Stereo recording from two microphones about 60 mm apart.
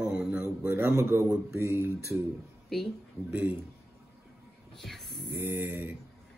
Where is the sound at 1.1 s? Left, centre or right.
Right.